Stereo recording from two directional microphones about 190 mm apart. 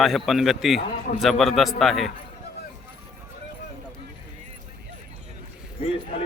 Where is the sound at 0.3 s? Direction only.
Centre (ahead or behind).